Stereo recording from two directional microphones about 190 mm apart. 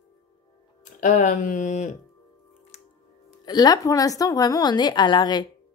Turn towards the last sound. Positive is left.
turn(degrees=20)  # may be behind; listen again after turning